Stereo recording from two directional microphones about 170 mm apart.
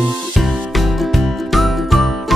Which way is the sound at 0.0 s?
Centre (ahead or behind).